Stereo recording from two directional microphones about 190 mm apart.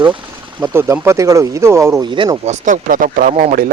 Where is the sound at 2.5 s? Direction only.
40° right (ahead or behind).